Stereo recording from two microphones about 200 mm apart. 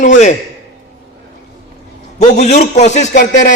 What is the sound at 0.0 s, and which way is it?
Speech, 40° left (ahead or behind).